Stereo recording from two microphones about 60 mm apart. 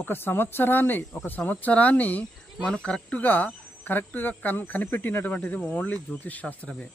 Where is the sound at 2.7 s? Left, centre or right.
Centre.